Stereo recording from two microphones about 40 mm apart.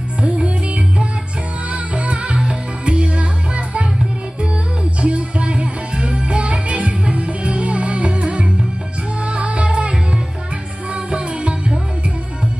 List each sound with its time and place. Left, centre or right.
0.2 s music: right
1.7 s music: right
5.0 s music: right
11.1 s music: right